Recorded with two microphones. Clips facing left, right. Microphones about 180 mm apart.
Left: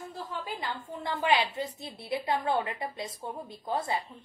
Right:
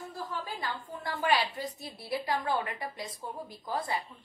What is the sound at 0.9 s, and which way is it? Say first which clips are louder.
Speech: left 2 dB; 20° left (ahead or behind).